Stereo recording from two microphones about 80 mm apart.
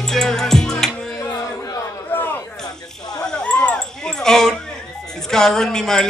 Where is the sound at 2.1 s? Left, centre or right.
Left.